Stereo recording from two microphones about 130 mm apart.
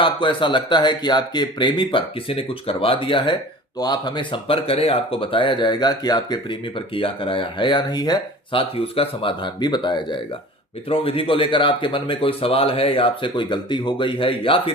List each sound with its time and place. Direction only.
0.0 s speech: 40° left (ahead or behind)
8.7 s speech: 45° left (ahead or behind)